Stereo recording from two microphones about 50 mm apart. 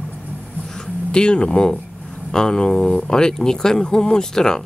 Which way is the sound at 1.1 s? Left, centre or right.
Centre.